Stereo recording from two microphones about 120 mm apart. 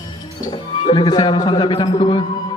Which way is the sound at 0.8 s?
40° left (ahead or behind).